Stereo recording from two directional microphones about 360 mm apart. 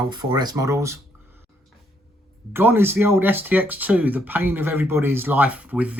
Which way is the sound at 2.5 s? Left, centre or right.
Centre.